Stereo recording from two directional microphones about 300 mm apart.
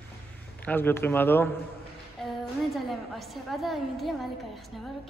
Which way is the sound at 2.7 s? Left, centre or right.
Centre.